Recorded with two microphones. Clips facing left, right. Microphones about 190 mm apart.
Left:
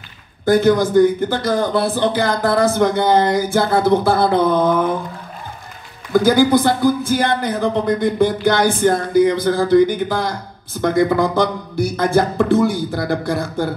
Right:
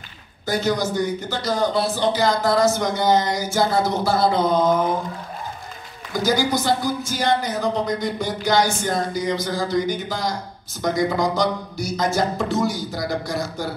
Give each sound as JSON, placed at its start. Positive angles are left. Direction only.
{"t": 0.5, "sound": "speech", "side_deg": 55}
{"t": 6.1, "sound": "speech", "side_deg": 55}